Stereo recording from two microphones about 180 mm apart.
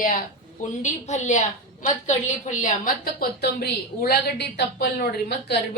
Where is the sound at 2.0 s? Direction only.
45° left (ahead or behind).